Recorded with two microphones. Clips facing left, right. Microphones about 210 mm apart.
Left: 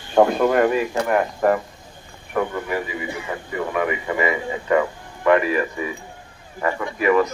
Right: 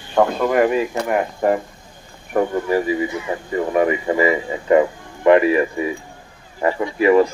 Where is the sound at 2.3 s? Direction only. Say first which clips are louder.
Right 5 dB; 35° right (ahead or behind).